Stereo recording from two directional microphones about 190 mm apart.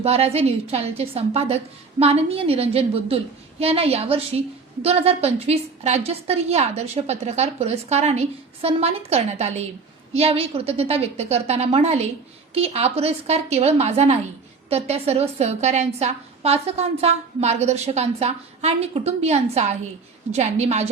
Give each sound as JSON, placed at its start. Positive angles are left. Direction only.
{"t": 0.0, "sound": "a woman's voice", "side_deg": -35}